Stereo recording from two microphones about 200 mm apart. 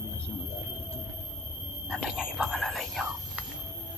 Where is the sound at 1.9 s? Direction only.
5° right (ahead or behind).